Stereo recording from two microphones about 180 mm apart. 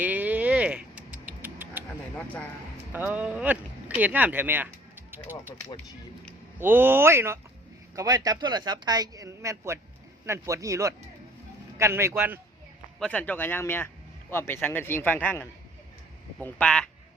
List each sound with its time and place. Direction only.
0.0 s livestock: 10° right (ahead or behind)
2.9 s speech: 10° right (ahead or behind)
6.6 s a man's voice: 10° right (ahead or behind)
13.0 s speech: 10° left (ahead or behind)